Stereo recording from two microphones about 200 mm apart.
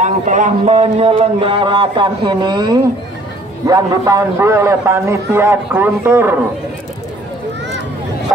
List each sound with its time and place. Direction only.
0.0 s a man's voice: 40° right (ahead or behind); by 6.3 s 10° right (ahead or behind)